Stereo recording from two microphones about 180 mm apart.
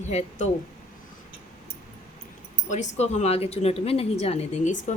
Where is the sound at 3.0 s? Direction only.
35° left (ahead or behind).